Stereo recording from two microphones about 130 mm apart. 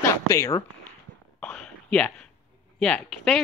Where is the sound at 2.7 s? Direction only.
5° left (ahead or behind).